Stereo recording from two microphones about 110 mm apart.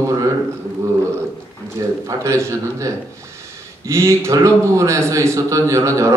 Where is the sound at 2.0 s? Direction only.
30° right (ahead or behind).